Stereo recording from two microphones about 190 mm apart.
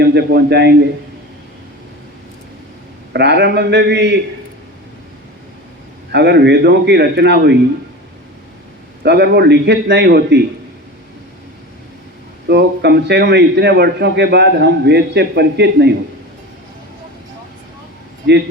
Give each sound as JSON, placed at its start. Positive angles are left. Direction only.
{"t": 0.0, "sound": "a man's voice", "side_deg": -60}
{"t": 3.1, "sound": "a man's voice", "side_deg": -60}
{"t": 6.1, "sound": "a man's voice", "side_deg": -60}
{"t": 9.0, "sound": "a man's voice", "side_deg": -60}
{"t": 12.5, "sound": "a man's voice", "side_deg": -60}